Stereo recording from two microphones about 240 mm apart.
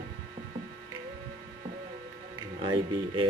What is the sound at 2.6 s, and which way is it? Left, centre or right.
Speech, right.